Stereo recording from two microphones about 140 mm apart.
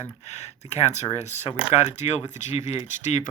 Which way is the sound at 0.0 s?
55° left (ahead or behind).